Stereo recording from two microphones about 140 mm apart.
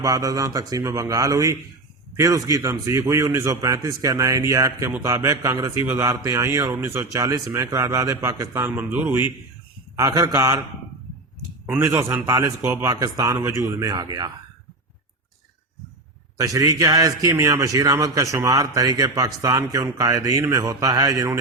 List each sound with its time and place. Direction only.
0.0 s a man's voice: 25° right (ahead or behind)
8.7 s speech: 10° right (ahead or behind)
9.9 s a man's voice: 25° right (ahead or behind)
11.6 s a man's voice: 15° right (ahead or behind)
16.4 s a man's voice: 25° right (ahead or behind)